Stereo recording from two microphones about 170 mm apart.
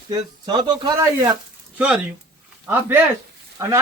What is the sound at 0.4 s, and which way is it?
Speech, 25° right (ahead or behind).